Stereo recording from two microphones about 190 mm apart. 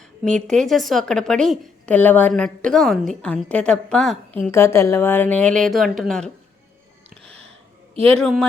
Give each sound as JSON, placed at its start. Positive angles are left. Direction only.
{"t": 0.3, "sound": "a woman's voice", "side_deg": 5}
{"t": 8.0, "sound": "a woman's voice", "side_deg": 5}